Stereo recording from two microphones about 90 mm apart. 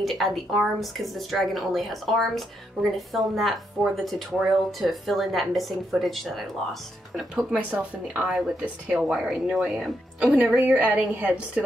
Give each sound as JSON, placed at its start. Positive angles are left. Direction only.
{"t": 0.0, "sound": "a woman's voice", "side_deg": 0}
{"t": 7.5, "sound": "speech", "side_deg": -10}